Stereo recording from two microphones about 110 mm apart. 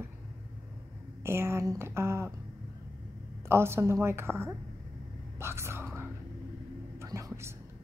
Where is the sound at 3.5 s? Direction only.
25° right (ahead or behind).